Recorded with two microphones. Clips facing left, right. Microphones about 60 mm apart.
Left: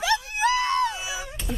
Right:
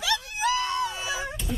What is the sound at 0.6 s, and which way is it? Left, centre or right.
Screaming, left.